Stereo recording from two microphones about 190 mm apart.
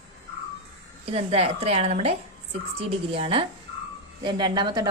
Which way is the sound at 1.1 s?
30° right (ahead or behind).